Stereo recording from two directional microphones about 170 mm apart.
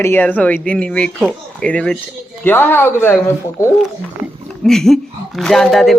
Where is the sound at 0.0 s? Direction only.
10° left (ahead or behind).